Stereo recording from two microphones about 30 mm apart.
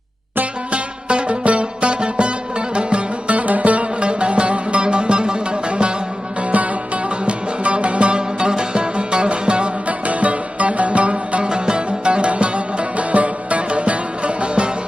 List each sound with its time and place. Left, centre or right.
0.7 s music: right
4.0 s music: right
6.5 s music: right
8.1 s music: right
10.1 s music: right
11.4 s music: right